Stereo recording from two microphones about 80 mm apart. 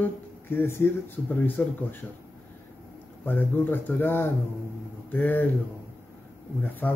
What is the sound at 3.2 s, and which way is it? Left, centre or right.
Speech, left.